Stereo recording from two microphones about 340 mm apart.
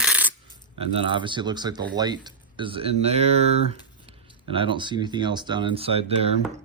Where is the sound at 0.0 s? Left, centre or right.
Centre.